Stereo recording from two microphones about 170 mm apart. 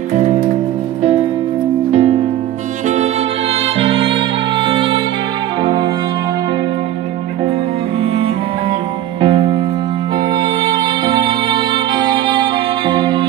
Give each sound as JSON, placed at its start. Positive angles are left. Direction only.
{"t": 0.1, "sound": "music", "side_deg": -45}
{"t": 1.9, "sound": "music", "side_deg": -40}
{"t": 3.6, "sound": "music", "side_deg": -35}
{"t": 8.0, "sound": "music", "side_deg": -30}